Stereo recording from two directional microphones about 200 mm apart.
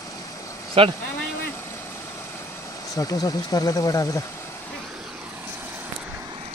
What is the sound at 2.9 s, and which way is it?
Speech, 15° left (ahead or behind).